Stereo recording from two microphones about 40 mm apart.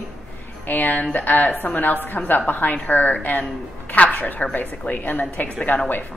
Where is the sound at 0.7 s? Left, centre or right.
Left.